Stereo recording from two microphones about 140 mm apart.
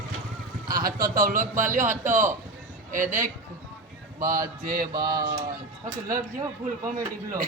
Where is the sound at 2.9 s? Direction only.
70° right (ahead or behind).